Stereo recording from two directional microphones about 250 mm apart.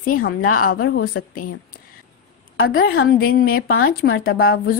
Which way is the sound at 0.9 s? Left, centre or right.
Left.